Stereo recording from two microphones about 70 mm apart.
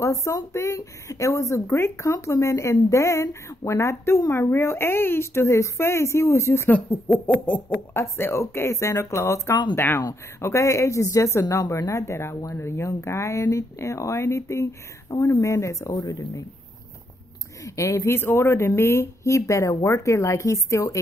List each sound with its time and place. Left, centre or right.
0.0 s speech: left
6.7 s speech: left
7.9 s speech: left
9.8 s speech: left
10.4 s speech: left
11.4 s speech: left
11.9 s speech: left
15.9 s speech: left
17.6 s speech: left
18.1 s speech: left